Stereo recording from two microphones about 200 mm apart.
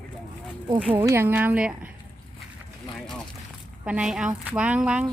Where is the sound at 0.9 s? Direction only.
10° right (ahead or behind).